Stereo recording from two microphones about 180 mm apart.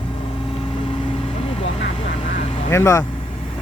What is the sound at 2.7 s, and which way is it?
Speech, 15° left (ahead or behind).